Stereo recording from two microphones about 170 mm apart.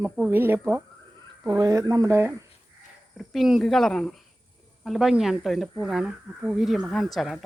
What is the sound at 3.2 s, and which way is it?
Speech, centre (ahead or behind).